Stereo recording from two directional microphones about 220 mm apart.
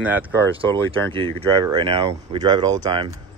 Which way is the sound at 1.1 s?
25° right (ahead or behind).